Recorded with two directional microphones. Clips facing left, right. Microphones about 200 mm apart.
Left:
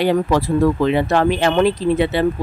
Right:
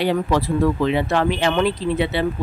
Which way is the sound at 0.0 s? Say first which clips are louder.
Left 3 dB; 45° left (ahead or behind).